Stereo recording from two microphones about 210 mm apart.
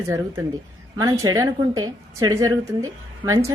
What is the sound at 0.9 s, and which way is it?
A woman's voice, 15° right (ahead or behind).